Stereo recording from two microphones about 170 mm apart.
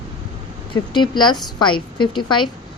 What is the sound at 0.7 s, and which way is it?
A woman's voice, 25° left (ahead or behind).